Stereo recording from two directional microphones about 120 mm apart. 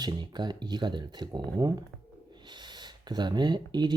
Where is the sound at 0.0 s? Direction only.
35° right (ahead or behind).